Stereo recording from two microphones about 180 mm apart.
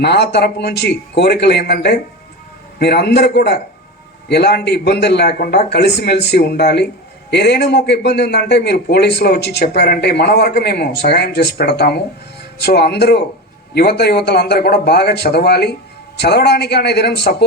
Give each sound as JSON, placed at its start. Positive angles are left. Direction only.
{"t": 0.0, "sound": "a man's voice", "side_deg": 65}